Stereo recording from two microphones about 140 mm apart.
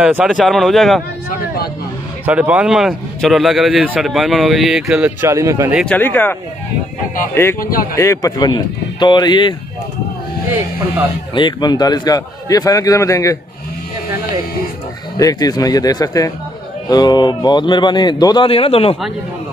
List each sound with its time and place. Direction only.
0.0 s a man's voice: 5° right (ahead or behind)
2.2 s a man's voice: 10° right (ahead or behind)
5.2 s speech: 20° right (ahead or behind)
5.9 s speech: 15° left (ahead or behind)
7.9 s a man's voice: 20° left (ahead or behind)
11.3 s a man's voice: 35° left (ahead or behind)
15.1 s a man's voice: 25° left (ahead or behind); by 18.9 s 40° left (ahead or behind)